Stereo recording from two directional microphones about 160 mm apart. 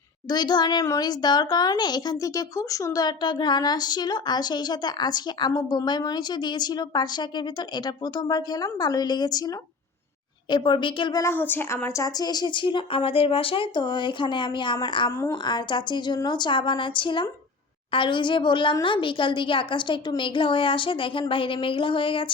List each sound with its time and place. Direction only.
0.3 s a child's voice: 25° left (ahead or behind)
11.2 s a child's voice: 15° left (ahead or behind); by 22.3 s 35° left (ahead or behind)